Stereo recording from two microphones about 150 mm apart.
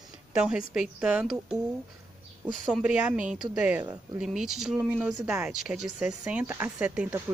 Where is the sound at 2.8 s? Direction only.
10° right (ahead or behind).